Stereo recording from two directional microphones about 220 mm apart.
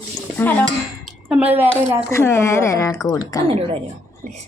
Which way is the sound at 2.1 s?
10° left (ahead or behind).